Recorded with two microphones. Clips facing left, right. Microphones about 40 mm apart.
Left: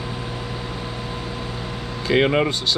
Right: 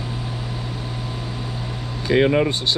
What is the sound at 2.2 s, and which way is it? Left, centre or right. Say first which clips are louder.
Speech: right 2 dB; left.